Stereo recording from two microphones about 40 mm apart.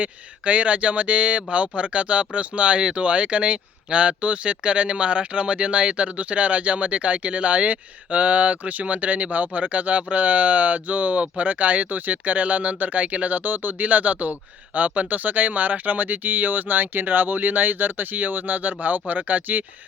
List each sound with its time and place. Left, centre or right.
0.0 s speech: right